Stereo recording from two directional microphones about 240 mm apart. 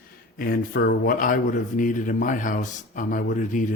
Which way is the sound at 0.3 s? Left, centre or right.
Left.